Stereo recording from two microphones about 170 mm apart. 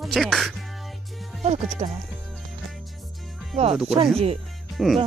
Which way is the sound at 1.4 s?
40° right (ahead or behind).